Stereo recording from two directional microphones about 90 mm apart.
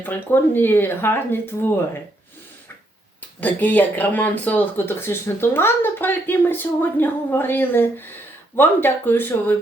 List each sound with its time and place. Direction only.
0.0 s speech: 20° left (ahead or behind)
3.4 s speech: 20° left (ahead or behind)